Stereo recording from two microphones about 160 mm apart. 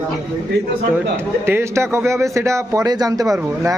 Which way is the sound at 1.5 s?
15° right (ahead or behind).